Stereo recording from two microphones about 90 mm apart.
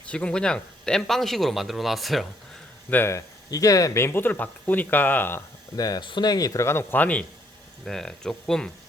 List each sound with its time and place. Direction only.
0.1 s speech: 15° left (ahead or behind)
2.9 s speech: 25° left (ahead or behind)
3.2 s speech: 40° left (ahead or behind); by 5.4 s 20° left (ahead or behind)
5.7 s speech: 45° left (ahead or behind); by 7.3 s 15° left (ahead or behind)
7.9 s speech: 5° left (ahead or behind)